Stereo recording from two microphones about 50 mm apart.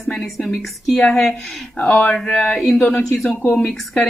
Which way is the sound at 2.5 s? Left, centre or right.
Centre.